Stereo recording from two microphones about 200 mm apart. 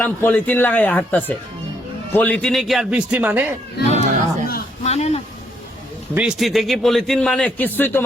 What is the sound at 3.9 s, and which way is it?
Chatter, 35° right (ahead or behind).